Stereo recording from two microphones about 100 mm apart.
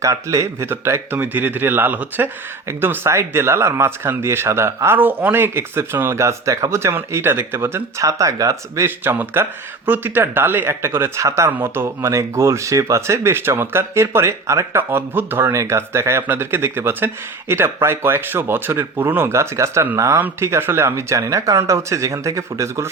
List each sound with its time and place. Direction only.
0.0 s speech: 35° right (ahead or behind)